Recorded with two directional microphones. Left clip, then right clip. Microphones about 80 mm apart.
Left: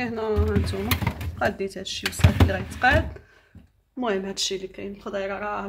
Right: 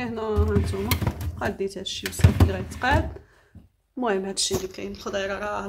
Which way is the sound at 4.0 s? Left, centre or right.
Centre.